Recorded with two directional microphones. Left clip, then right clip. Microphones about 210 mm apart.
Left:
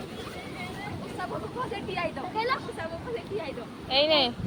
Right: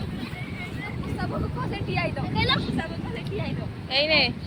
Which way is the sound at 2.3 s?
5° right (ahead or behind).